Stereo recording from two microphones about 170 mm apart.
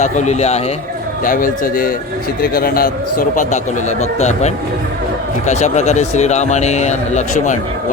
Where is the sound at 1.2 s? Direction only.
55° left (ahead or behind).